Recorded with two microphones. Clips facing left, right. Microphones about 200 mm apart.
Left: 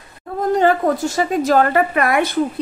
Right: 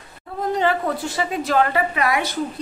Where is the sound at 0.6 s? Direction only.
45° left (ahead or behind).